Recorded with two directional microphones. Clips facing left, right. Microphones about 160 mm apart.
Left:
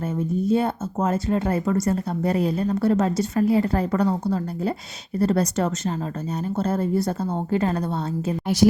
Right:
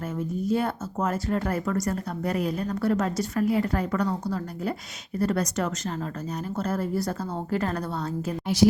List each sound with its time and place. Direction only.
0.0 s speech: 25° left (ahead or behind)